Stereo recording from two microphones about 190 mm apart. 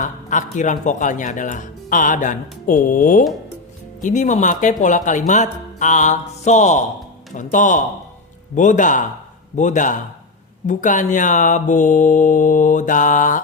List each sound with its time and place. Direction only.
0.0 s speech: 40° left (ahead or behind)